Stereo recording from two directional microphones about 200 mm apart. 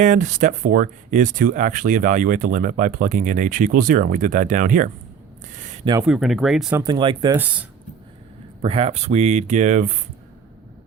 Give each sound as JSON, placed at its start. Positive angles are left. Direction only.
{"t": 0.0, "sound": "speech", "side_deg": -40}
{"t": 6.0, "sound": "speech", "side_deg": 0}
{"t": 6.7, "sound": "speech", "side_deg": -20}
{"t": 7.3, "sound": "speech", "side_deg": -10}
{"t": 8.6, "sound": "speech", "side_deg": -30}